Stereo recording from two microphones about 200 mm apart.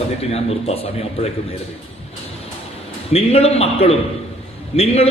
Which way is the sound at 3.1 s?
30° left (ahead or behind).